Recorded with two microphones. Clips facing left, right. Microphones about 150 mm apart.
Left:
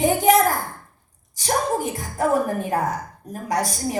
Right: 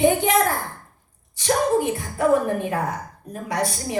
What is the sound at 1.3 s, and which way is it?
Speech, 40° left (ahead or behind).